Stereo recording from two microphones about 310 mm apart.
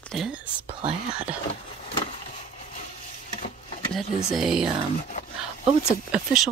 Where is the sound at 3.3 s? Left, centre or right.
Left.